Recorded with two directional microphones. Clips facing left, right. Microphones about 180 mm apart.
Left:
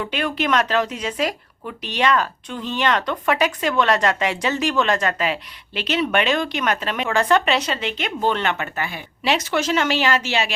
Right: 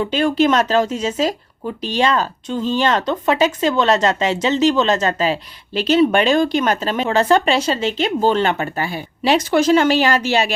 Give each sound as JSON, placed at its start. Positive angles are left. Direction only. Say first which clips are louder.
{"t": 0.0, "sound": "speech", "louder": "right 8 dB", "side_deg": -30}